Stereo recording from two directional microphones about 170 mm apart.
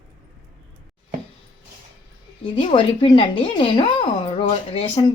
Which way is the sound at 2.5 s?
30° left (ahead or behind).